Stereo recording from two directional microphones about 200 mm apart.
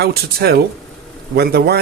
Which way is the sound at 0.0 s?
50° right (ahead or behind).